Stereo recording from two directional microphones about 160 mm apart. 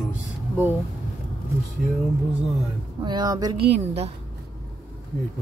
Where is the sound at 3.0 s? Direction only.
25° right (ahead or behind).